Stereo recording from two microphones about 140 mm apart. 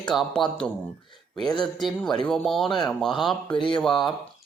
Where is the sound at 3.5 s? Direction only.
35° left (ahead or behind).